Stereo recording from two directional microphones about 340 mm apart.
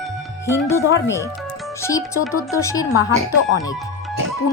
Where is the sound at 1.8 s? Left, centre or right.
Centre.